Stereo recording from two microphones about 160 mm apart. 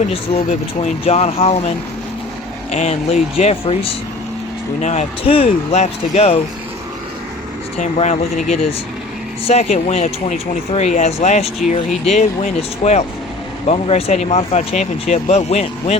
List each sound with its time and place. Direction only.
0.1 s speech: 35° left (ahead or behind)
2.7 s speech: 45° left (ahead or behind)
7.8 s speech: 45° left (ahead or behind)